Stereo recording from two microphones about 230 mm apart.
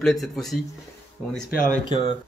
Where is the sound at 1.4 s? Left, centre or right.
Left.